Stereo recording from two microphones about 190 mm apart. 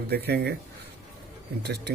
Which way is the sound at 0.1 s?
60° right (ahead or behind).